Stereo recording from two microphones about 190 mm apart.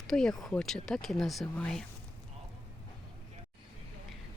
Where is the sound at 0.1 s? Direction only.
5° left (ahead or behind).